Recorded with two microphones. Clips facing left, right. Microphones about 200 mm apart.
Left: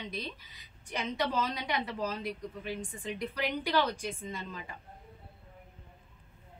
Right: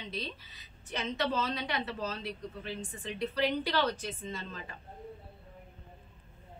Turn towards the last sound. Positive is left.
turn(degrees=10)  # may be behind; listen again after turning